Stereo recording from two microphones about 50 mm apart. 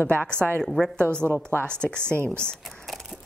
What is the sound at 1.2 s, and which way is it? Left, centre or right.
Speech, left.